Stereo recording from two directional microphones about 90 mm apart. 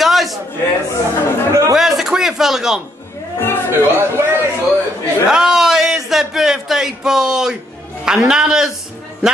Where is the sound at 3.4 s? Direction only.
25° left (ahead or behind).